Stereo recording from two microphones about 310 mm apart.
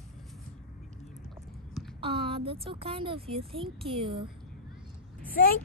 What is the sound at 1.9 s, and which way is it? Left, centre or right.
Speech, centre.